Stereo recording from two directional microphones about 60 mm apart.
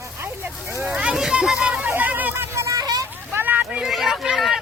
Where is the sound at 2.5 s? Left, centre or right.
Right.